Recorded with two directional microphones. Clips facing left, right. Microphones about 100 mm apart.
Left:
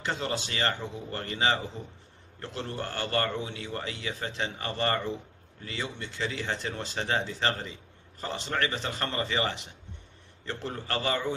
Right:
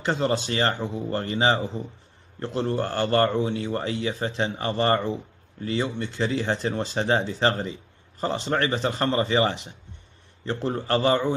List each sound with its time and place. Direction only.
0.0 s a man's voice: 35° right (ahead or behind)